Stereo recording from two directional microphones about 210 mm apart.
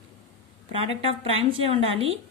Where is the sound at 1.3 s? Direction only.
25° right (ahead or behind).